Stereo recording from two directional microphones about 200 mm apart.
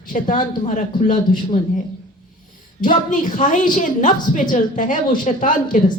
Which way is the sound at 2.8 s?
40° left (ahead or behind).